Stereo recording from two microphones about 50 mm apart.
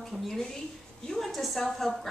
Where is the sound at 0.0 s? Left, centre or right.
Centre.